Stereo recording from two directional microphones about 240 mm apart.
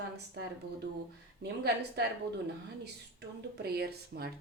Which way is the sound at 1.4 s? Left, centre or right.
Right.